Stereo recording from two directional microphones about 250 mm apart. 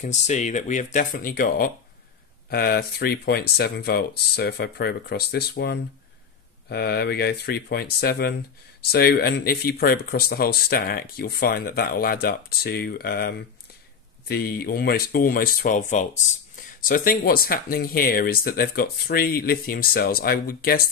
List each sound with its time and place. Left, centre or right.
0.0 s speech: left